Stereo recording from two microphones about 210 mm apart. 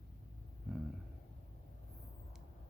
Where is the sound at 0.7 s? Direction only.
Centre (ahead or behind).